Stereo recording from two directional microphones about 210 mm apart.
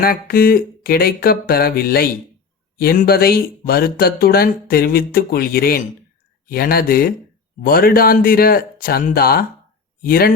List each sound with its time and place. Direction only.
0.0 s speech: 45° left (ahead or behind)